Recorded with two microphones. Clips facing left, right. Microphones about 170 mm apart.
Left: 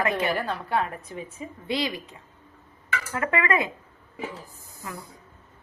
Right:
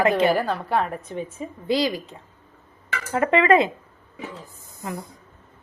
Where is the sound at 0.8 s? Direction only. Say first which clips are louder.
Right 4 dB; 30° right (ahead or behind).